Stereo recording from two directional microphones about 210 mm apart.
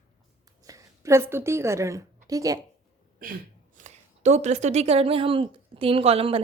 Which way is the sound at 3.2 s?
40° right (ahead or behind).